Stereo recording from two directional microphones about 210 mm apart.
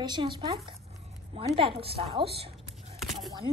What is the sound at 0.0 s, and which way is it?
A woman's voice, 20° right (ahead or behind).